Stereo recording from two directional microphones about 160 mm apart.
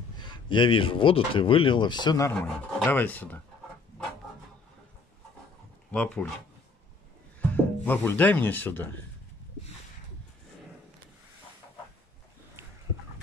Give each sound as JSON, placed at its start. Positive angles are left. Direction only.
{"t": 0.2, "sound": "speech", "side_deg": 30}
{"t": 5.9, "sound": "speech", "side_deg": 5}
{"t": 7.3, "sound": "speech", "side_deg": 10}